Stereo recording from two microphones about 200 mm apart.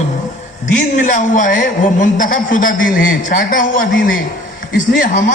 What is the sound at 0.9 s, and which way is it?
A man's voice, 40° left (ahead or behind).